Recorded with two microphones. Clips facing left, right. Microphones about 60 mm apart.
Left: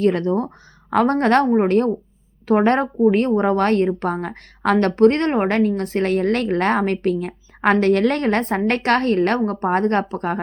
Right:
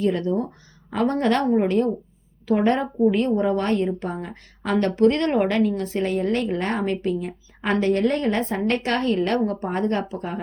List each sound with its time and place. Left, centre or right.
0.0 s a woman's voice: left